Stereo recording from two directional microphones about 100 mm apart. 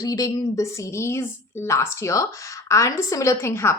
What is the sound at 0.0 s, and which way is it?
A woman's voice, 35° left (ahead or behind).